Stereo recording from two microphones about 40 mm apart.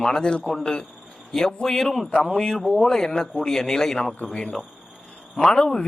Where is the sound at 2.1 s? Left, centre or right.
Left.